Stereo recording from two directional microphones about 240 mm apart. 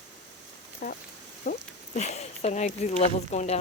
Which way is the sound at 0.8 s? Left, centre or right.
Left.